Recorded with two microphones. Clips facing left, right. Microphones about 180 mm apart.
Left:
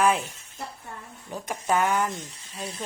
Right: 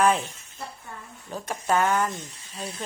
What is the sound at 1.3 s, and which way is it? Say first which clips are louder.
Speech: right 1 dB; 15° left (ahead or behind).